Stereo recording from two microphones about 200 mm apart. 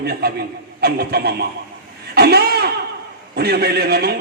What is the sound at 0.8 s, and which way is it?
Speech, 50° right (ahead or behind).